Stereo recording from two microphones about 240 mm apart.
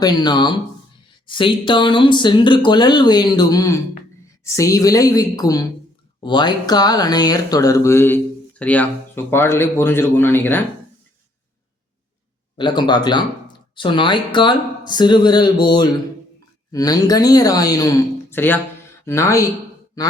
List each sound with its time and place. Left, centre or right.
0.0 s speech: centre
12.5 s speech: centre